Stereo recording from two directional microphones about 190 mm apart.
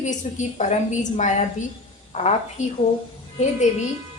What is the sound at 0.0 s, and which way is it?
A woman's voice, 40° left (ahead or behind).